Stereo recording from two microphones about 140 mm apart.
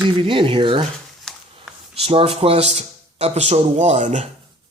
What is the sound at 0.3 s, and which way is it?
Speech, 35° right (ahead or behind).